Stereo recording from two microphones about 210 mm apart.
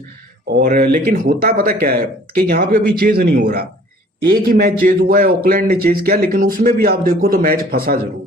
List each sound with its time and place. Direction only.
0.5 s speech: 40° right (ahead or behind)